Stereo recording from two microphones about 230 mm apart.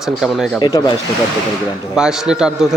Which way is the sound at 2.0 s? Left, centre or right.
Centre.